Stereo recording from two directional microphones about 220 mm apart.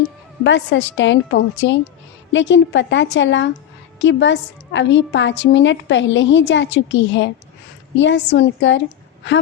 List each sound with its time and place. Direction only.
0.4 s a woman's voice: 55° left (ahead or behind)